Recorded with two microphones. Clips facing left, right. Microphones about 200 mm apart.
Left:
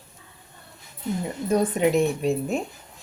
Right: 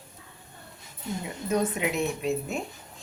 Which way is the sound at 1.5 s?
35° left (ahead or behind).